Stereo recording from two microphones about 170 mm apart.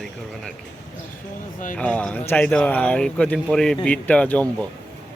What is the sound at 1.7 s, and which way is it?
Speech, 10° left (ahead or behind).